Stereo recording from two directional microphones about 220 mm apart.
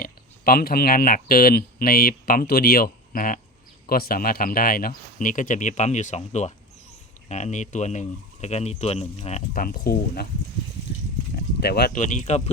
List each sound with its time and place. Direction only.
0.0 s speech: 40° left (ahead or behind)
9.5 s speech: 40° left (ahead or behind)
11.6 s speech: 45° left (ahead or behind)